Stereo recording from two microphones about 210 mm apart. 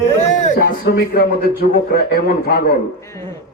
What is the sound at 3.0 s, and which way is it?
Speech, 15° left (ahead or behind).